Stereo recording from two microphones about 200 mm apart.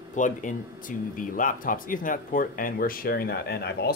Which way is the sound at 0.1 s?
40° left (ahead or behind).